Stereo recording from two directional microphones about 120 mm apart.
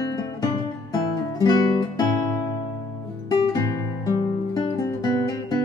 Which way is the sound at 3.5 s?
25° left (ahead or behind).